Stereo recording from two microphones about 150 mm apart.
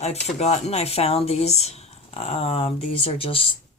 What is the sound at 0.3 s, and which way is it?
Speech, 45° left (ahead or behind).